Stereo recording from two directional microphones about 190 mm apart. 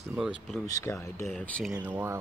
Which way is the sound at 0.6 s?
15° left (ahead or behind).